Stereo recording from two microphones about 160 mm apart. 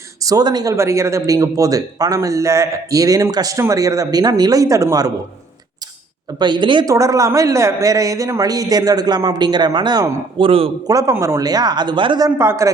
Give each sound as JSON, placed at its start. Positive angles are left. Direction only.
{"t": 0.3, "sound": "a man's voice", "side_deg": -25}
{"t": 6.4, "sound": "a man's voice", "side_deg": -30}
{"t": 10.8, "sound": "a man's voice", "side_deg": -20}
{"t": 12.4, "sound": "a man's voice", "side_deg": -15}